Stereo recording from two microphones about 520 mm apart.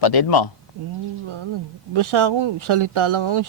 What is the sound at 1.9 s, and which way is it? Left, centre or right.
Speech, right.